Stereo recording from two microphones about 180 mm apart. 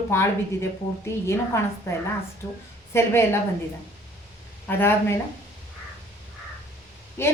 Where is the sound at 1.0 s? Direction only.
15° left (ahead or behind).